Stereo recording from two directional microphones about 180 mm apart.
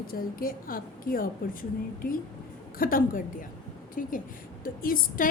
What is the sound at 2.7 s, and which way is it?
A woman's voice, 50° left (ahead or behind).